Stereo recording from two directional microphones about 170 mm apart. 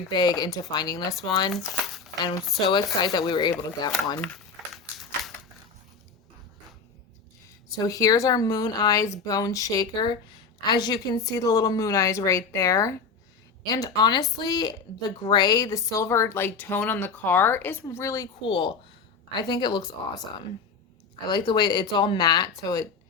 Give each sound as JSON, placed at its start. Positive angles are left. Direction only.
{"t": 0.1, "sound": "speech", "side_deg": 25}
{"t": 1.5, "sound": "speech", "side_deg": 0}
{"t": 2.6, "sound": "speech", "side_deg": 25}
{"t": 4.2, "sound": "a sound", "side_deg": 0}
{"t": 7.8, "sound": "a woman's voice", "side_deg": 20}
{"t": 21.2, "sound": "speech", "side_deg": 25}